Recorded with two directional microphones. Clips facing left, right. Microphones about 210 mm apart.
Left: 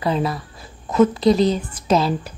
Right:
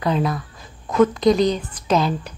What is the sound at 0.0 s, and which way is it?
A woman's voice, 5° left (ahead or behind).